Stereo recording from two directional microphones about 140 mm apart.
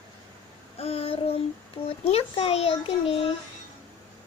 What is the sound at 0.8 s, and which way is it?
A child's voice, 45° left (ahead or behind).